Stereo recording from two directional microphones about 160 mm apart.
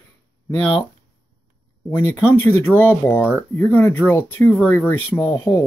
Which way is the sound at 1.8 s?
15° left (ahead or behind).